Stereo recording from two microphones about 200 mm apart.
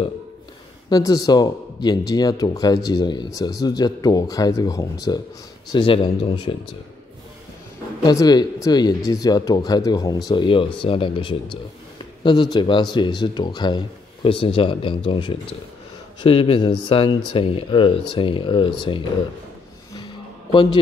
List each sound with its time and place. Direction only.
0.8 s speech: 20° left (ahead or behind)
8.0 s speech: 20° left (ahead or behind)